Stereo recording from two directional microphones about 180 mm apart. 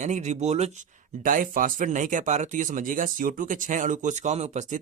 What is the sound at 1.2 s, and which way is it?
Speech, 50° right (ahead or behind).